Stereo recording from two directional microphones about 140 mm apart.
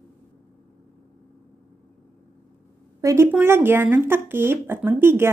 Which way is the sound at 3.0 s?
25° right (ahead or behind).